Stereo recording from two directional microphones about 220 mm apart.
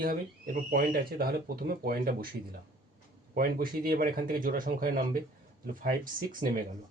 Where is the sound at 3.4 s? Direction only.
40° right (ahead or behind).